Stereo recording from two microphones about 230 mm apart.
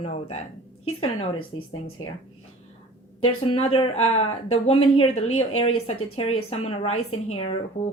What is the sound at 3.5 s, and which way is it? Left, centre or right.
A woman's voice, left.